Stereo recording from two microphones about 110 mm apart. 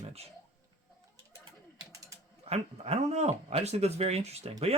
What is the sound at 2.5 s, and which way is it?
Speech, 75° right (ahead or behind).